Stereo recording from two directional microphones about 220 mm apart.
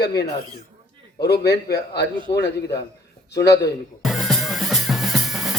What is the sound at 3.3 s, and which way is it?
Speech, 50° left (ahead or behind).